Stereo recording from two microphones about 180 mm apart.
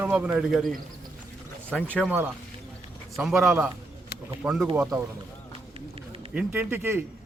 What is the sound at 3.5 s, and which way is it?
Speech, 15° right (ahead or behind).